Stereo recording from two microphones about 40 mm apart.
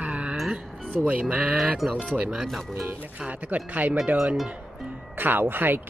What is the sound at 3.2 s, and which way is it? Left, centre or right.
Speech, right.